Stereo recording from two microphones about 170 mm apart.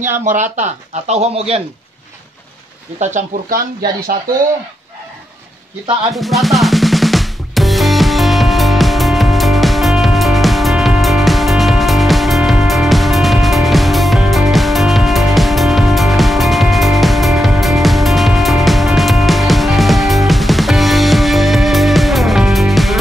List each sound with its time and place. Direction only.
0.2 s speech: 45° right (ahead or behind)
3.0 s speech: 45° right (ahead or behind)
6.1 s drum: centre (ahead or behind)